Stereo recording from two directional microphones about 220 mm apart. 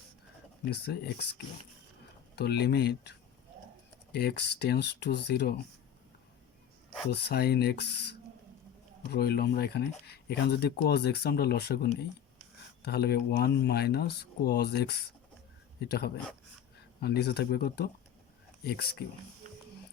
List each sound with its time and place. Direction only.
0.7 s speech: 45° left (ahead or behind)
2.3 s speech: 50° left (ahead or behind)
7.1 s speech: 45° left (ahead or behind)
9.1 s speech: 45° left (ahead or behind)